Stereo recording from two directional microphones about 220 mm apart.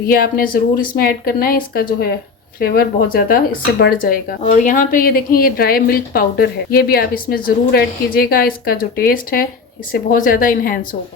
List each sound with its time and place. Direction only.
0.0 s speech: 40° left (ahead or behind)